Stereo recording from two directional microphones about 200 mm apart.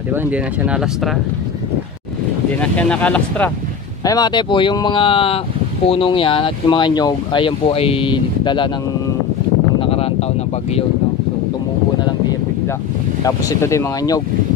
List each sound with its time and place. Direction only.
0.1 s speech: 10° right (ahead or behind)
2.6 s speech: 5° left (ahead or behind)
4.0 s speech: 20° left (ahead or behind)
9.8 s a sound: 30° left (ahead or behind)
13.2 s speech: 15° left (ahead or behind)